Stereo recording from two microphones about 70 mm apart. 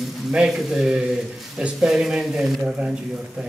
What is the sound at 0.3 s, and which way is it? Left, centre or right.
A man's voice, centre.